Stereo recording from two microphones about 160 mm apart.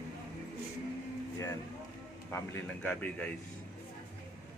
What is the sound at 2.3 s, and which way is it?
A man's voice, 10° left (ahead or behind).